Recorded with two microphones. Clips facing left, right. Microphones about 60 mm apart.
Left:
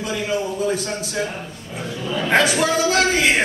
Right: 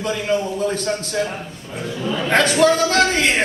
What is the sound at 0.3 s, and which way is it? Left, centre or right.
A man's voice, centre.